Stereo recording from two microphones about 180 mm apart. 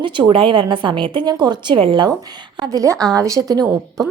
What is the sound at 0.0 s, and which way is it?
A woman's voice, 25° right (ahead or behind).